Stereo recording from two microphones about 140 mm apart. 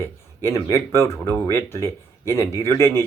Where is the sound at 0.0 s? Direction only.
20° left (ahead or behind).